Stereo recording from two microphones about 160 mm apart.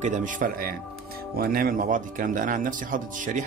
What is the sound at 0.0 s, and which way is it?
A man's voice, 50° right (ahead or behind).